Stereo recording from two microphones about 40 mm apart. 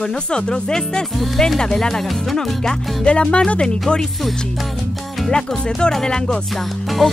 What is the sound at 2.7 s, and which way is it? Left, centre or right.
Speech, left.